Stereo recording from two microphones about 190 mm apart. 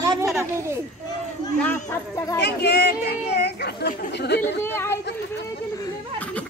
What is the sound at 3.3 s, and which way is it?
Chatter, 60° left (ahead or behind).